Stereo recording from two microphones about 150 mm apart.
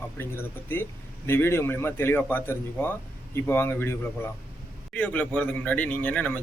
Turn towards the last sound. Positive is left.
turn(degrees=10)  # may be behind; listen again after turning